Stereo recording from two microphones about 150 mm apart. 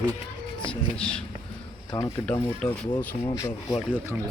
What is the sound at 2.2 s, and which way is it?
Speech, 10° left (ahead or behind).